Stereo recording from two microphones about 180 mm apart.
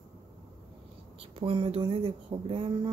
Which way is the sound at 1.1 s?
30° right (ahead or behind).